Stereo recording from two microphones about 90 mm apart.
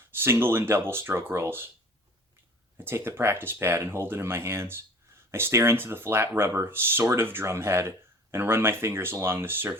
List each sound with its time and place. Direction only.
0.1 s speech: 25° right (ahead or behind)
2.7 s speech: 25° right (ahead or behind)